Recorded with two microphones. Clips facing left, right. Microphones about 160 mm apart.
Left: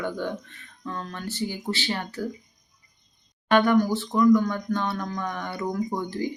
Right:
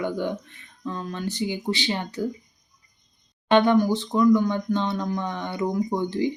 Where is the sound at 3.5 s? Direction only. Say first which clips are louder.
Right 2 dB; 20° right (ahead or behind).